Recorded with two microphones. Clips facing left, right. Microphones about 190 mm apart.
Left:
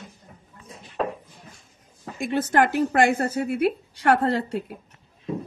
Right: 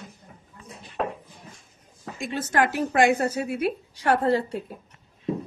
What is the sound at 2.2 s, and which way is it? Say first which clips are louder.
A woman's voice: left 3 dB; 55° left (ahead or behind).